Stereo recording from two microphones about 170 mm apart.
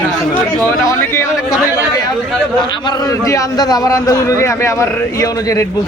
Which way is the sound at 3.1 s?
20° left (ahead or behind).